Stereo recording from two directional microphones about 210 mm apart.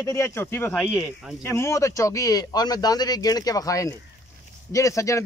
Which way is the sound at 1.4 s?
15° left (ahead or behind).